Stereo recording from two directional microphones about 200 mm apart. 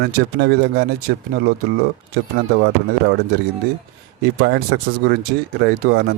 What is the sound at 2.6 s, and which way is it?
Speech, 50° right (ahead or behind).